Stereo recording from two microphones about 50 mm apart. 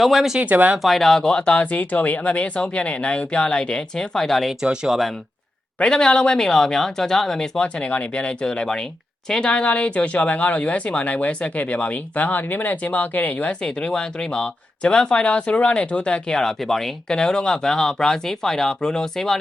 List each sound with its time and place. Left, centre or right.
0.0 s speech: centre
4.6 s speech: centre
4.9 s speech: centre
5.8 s speech: centre
7.6 s speech: left
13.5 s speech: centre
16.3 s speech: centre